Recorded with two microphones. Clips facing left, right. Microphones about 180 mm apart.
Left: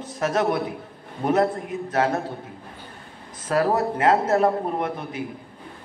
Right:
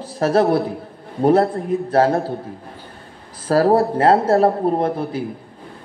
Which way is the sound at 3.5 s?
30° right (ahead or behind).